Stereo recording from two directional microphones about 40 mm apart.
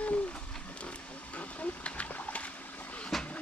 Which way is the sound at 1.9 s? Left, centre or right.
Left.